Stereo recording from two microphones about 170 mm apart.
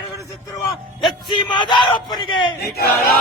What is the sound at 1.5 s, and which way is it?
Speech, 25° left (ahead or behind).